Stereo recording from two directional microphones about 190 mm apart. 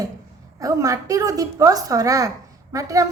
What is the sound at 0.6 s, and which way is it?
A woman's voice, 20° right (ahead or behind).